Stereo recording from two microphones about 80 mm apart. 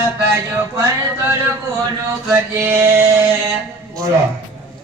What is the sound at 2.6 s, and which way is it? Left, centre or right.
Mantra, right.